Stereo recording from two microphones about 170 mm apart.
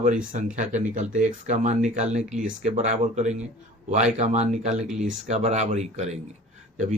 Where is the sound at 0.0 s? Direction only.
45° right (ahead or behind).